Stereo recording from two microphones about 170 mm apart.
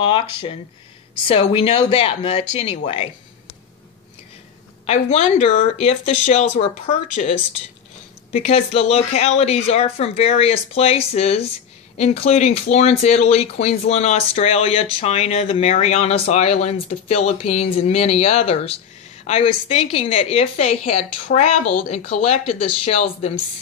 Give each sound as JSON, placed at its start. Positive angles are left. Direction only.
{"t": 0.0, "sound": "speech", "side_deg": 30}
{"t": 4.8, "sound": "speech", "side_deg": 40}
{"t": 8.3, "sound": "speech", "side_deg": 40}